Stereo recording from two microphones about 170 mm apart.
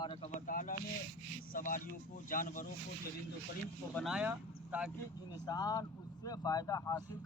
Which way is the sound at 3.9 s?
5° right (ahead or behind).